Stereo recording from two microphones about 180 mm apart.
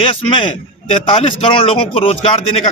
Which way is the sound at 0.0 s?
30° left (ahead or behind).